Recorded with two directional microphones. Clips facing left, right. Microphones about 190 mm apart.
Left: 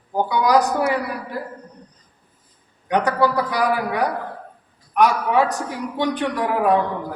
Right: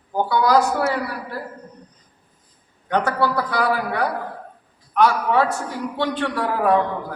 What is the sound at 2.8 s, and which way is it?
A man's voice, 15° left (ahead or behind).